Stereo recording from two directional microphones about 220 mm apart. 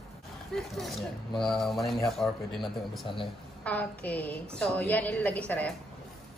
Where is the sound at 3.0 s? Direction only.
20° left (ahead or behind).